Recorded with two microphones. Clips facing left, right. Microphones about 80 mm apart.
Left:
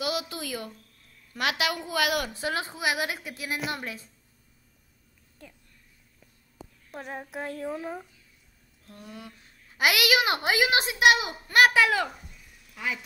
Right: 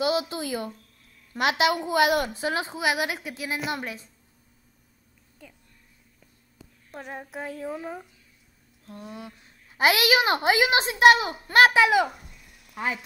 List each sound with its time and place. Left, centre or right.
0.0 s a woman's voice: right
6.9 s a woman's voice: centre
8.8 s a woman's voice: right
11.4 s a woman's voice: right
12.1 s a sound: centre
12.4 s a sound: right
12.7 s speech: right